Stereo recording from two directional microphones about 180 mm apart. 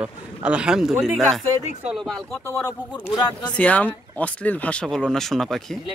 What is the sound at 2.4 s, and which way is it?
Speech, 15° left (ahead or behind).